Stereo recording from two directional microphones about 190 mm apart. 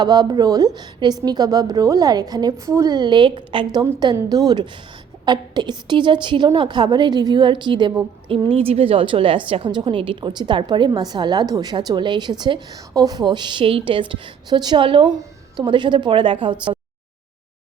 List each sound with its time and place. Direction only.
0.0 s a woman's voice: 20° right (ahead or behind)